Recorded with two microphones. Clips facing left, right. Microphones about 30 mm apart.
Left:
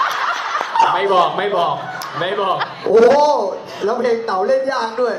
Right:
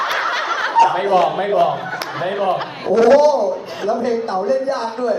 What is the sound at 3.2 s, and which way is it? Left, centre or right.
A man's voice, left.